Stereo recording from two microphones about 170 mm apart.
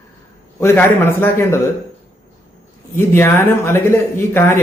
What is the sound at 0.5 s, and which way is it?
A man's voice, 15° left (ahead or behind).